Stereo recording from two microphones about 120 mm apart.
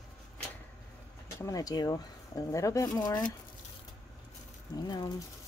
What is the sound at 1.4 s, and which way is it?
Speech, 30° left (ahead or behind).